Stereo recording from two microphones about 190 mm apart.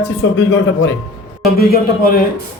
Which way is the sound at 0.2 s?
80° left.